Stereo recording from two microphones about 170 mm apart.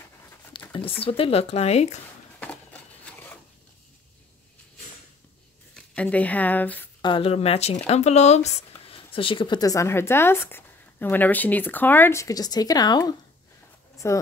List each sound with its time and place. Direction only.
0.7 s speech: 35° left (ahead or behind)
2.4 s a sound: 10° left (ahead or behind)
5.8 s speech: 10° left (ahead or behind)
7.0 s speech: 30° left (ahead or behind)